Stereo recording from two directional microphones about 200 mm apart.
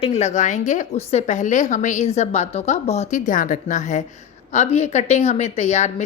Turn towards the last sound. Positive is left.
turn(degrees=35)  # may be behind; listen again after turning